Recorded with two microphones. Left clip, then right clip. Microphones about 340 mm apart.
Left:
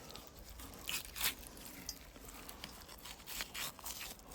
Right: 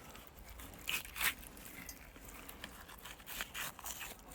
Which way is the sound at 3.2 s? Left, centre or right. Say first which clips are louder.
Even; centre.